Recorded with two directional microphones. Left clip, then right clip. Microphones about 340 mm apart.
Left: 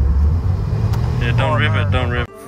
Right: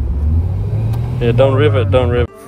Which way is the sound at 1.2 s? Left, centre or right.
Centre.